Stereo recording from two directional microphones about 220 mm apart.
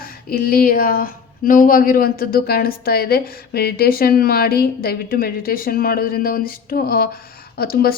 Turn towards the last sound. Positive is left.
turn(degrees=45)  # may be behind; listen again after turning